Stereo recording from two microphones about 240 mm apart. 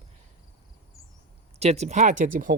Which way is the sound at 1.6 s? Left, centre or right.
Right.